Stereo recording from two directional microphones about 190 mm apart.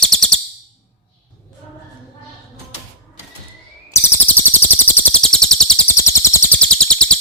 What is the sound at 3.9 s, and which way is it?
Bird, 15° left (ahead or behind).